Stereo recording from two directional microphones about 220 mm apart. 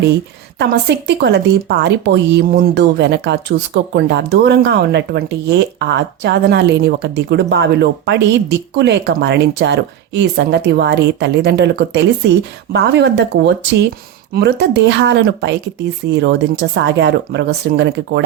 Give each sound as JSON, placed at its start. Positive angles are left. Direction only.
{"t": 0.6, "sound": "speech", "side_deg": -50}